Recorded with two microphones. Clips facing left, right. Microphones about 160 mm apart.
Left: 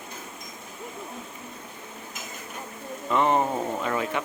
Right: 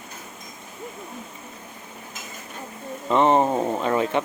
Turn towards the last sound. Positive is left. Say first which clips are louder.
# right 5 dB
turn(degrees=-30)  # may be behind; listen again after turning